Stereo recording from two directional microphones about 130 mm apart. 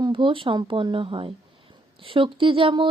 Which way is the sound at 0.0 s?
40° right (ahead or behind).